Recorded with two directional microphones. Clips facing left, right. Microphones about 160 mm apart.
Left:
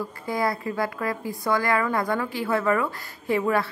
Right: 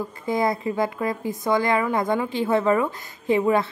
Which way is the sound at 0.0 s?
20° right (ahead or behind).